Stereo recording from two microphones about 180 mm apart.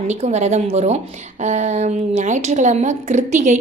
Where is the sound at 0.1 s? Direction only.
40° right (ahead or behind).